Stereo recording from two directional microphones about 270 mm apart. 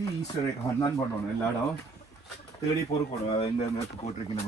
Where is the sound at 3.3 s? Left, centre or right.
Left.